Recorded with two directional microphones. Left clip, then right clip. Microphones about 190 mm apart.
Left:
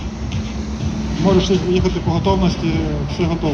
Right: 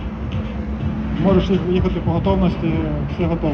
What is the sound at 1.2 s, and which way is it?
Speech, 5° right (ahead or behind).